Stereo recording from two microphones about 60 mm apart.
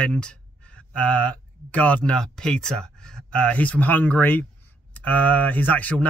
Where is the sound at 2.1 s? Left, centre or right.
Centre.